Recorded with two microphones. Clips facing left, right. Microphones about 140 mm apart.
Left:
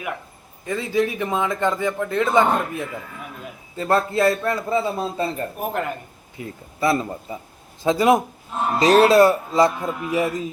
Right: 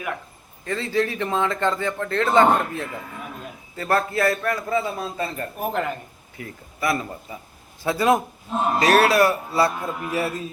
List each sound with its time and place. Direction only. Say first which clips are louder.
0.6 s a man's voice: left 2 dB; 15° left (ahead or behind)
5.5 s a man's voice: right 4 dB; 5° left (ahead or behind)
6.3 s a man's voice: left 3 dB; 25° left (ahead or behind)
7.9 s a man's voice: left 3 dB; 15° left (ahead or behind)